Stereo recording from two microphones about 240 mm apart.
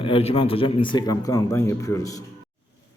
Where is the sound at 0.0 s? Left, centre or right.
Left.